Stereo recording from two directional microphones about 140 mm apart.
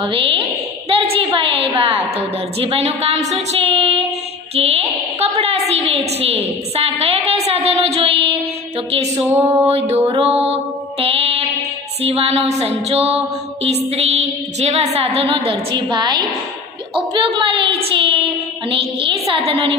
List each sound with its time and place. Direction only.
0.0 s a sound: 40° right (ahead or behind)
1.8 s a woman's voice: 45° right (ahead or behind)
9.4 s music: 20° right (ahead or behind)
9.7 s a woman's voice: 50° right (ahead or behind)
10.1 s mantra: 45° right (ahead or behind)
12.0 s a woman's voice: 45° right (ahead or behind)
17.9 s child singing: 40° right (ahead or behind)